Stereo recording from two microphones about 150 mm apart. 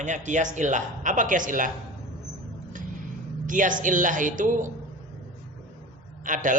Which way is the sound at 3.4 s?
60° right (ahead or behind).